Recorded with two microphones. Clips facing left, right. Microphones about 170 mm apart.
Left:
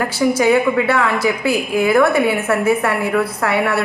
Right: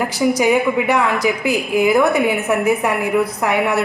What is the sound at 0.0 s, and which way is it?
A woman's voice, 15° right (ahead or behind).